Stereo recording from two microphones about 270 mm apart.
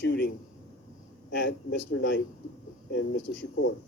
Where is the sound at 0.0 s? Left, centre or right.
Left.